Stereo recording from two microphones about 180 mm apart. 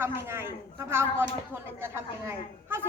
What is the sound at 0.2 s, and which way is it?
A woman's voice, 15° right (ahead or behind).